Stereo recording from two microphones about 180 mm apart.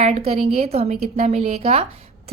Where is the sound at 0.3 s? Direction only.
35° right (ahead or behind).